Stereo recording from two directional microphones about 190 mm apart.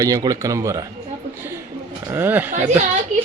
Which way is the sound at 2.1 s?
10° right (ahead or behind).